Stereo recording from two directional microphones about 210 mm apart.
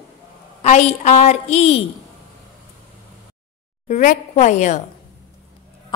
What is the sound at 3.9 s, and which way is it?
Speech, 35° left (ahead or behind).